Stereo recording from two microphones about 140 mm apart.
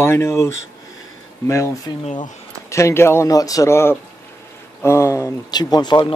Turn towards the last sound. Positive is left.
turn(degrees=30)  # may be behind; listen again after turning